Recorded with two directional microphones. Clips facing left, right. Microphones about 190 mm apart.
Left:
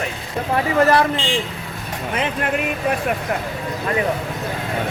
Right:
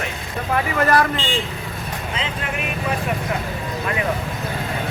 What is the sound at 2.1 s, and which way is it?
Speech, 55° left (ahead or behind).